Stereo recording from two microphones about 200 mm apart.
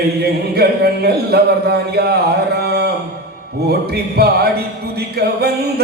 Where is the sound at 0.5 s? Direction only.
55° right (ahead or behind).